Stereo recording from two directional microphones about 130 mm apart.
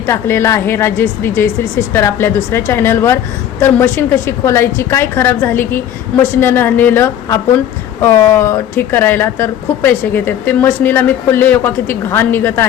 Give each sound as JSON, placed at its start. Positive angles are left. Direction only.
{"t": 0.0, "sound": "a woman's voice", "side_deg": 20}